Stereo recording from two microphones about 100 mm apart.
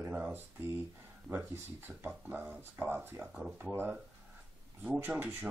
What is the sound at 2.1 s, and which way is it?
Speech, 15° right (ahead or behind).